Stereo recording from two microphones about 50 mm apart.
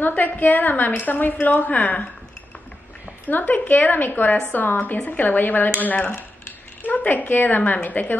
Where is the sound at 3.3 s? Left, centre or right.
Left.